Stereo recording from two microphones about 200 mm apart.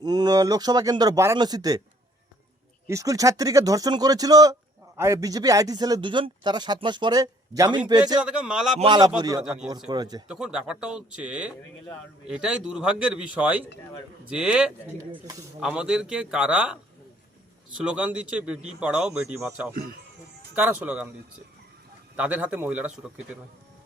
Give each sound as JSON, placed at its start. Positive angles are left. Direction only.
{"t": 0.0, "sound": "speech", "side_deg": -20}
{"t": 2.8, "sound": "speech", "side_deg": -15}
{"t": 8.2, "sound": "a man's voice", "side_deg": -5}
{"t": 8.8, "sound": "speech", "side_deg": -20}
{"t": 9.4, "sound": "a man's voice", "side_deg": -5}
{"t": 9.9, "sound": "speech", "side_deg": -20}
{"t": 10.2, "sound": "a man's voice", "side_deg": -5}
{"t": 17.7, "sound": "a man's voice", "side_deg": -5}
{"t": 22.1, "sound": "speech", "side_deg": -5}